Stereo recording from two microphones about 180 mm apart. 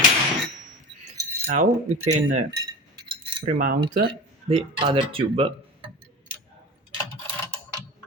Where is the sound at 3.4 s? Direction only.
50° right (ahead or behind).